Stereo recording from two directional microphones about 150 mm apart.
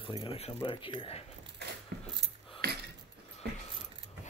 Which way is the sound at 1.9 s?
90° right.